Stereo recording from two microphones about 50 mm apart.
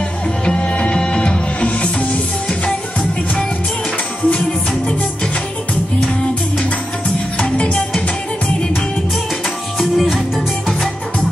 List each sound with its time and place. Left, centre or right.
0.5 s music: left
7.3 s music: left
9.8 s music: centre